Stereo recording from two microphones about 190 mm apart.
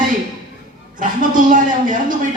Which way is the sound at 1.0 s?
45° right (ahead or behind).